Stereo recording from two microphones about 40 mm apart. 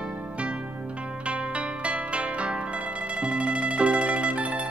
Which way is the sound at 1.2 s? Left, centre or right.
Right.